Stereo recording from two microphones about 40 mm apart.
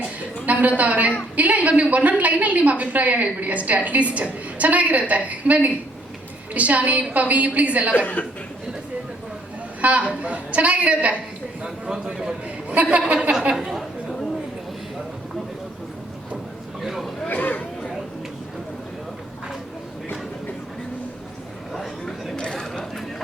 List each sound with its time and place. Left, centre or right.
0.4 s a woman's voice: right
7.9 s speech: left
9.8 s a woman's voice: right
11.6 s a sound: right
12.7 s a woman's voice: right
16.8 s speech: centre
17.2 s speech: left
21.7 s a sound: centre
22.7 s chatter: centre